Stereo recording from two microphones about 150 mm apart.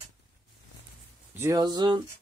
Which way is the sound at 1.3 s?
15° right (ahead or behind).